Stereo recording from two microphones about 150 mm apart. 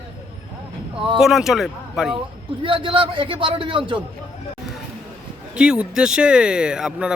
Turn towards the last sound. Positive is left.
turn(degrees=-5)  # may be behind; listen again after turning